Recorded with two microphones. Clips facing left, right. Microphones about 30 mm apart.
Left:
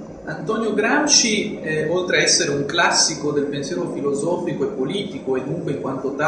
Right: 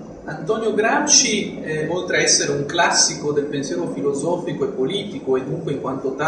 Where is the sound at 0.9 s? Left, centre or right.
Left.